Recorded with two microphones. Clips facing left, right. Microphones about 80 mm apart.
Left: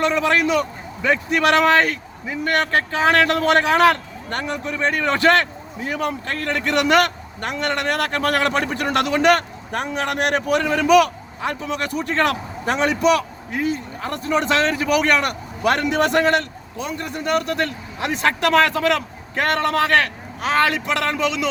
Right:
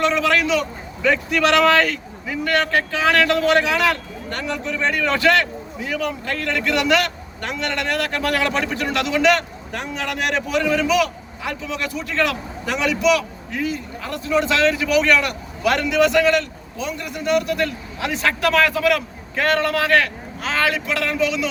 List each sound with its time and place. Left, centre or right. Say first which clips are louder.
0.0 s a man's voice: even; left
1.0 s speech: even; left
2.4 s a man's voice: even; left